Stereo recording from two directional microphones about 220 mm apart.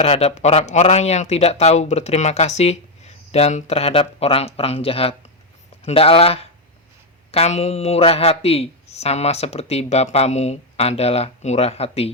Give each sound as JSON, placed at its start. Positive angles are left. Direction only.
{"t": 0.0, "sound": "a man's voice", "side_deg": 30}